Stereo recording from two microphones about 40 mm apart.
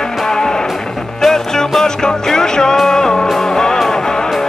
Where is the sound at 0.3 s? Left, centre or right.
Centre.